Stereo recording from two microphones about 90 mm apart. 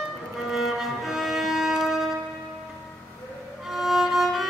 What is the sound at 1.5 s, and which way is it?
Wind instrument, centre (ahead or behind).